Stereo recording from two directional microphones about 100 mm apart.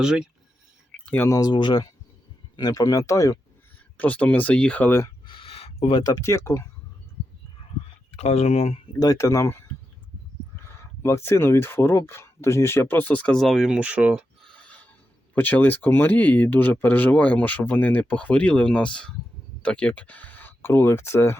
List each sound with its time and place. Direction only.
0.0 s speech: 5° right (ahead or behind)
0.9 s a sound: 10° left (ahead or behind)
1.4 s speech: 45° left (ahead or behind)
3.9 s speech: 15° left (ahead or behind)
5.2 s a sound: 55° left (ahead or behind); by 6.0 s 80° left
6.0 s speech: 40° left (ahead or behind)
8.2 s speech: 90° left
9.0 s speech: 35° left (ahead or behind)
10.8 s speech: 25° left (ahead or behind)
13.4 s speech: centre (ahead or behind)
14.4 s a sound: 10° left (ahead or behind)
15.4 s speech: 15° left (ahead or behind)